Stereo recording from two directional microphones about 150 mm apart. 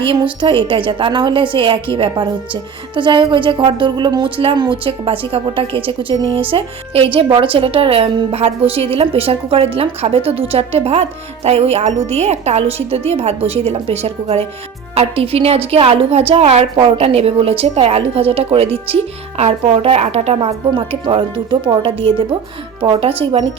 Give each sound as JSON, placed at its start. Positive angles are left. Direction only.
{"t": 0.0, "sound": "a woman's voice", "side_deg": -35}